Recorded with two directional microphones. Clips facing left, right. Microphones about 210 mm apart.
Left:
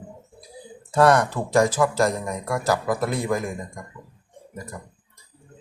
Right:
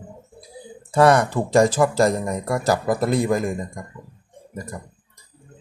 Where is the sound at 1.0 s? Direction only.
10° right (ahead or behind).